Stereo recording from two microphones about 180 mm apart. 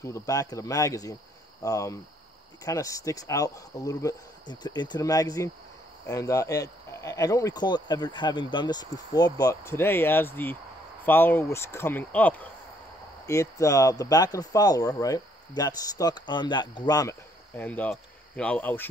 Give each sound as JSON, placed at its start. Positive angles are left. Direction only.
{"t": 0.0, "sound": "speech", "side_deg": 15}